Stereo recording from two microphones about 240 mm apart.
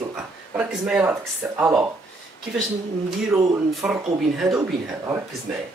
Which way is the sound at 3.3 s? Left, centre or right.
Centre.